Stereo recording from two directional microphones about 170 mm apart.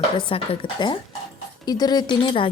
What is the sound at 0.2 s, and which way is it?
A woman's voice, 30° left (ahead or behind).